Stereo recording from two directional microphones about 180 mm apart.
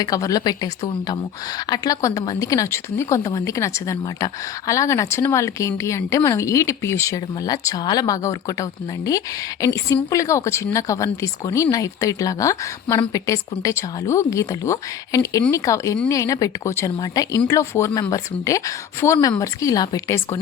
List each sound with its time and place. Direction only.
0.0 s speech: 20° left (ahead or behind)